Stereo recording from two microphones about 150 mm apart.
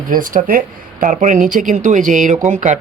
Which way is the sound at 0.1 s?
65° right (ahead or behind).